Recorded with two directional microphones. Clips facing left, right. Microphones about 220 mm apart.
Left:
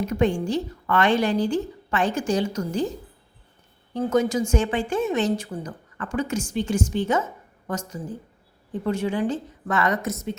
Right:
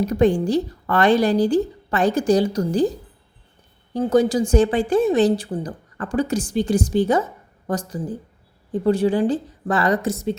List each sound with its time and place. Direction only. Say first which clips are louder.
0.0 s a woman's voice: right 5 dB; 35° right (ahead or behind)
3.9 s a woman's voice: right 4 dB; 35° right (ahead or behind)